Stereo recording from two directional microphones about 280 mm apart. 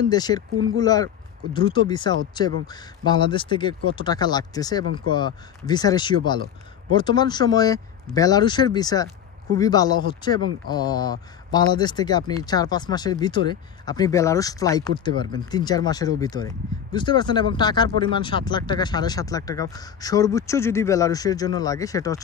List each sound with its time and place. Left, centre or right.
0.1 s speech: centre